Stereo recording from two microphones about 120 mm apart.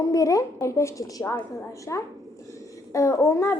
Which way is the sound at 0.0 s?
30° left (ahead or behind).